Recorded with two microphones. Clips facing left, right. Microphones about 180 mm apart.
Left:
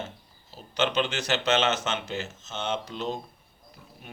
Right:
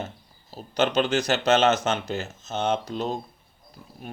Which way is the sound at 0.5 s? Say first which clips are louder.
Right 3 dB; 40° right (ahead or behind).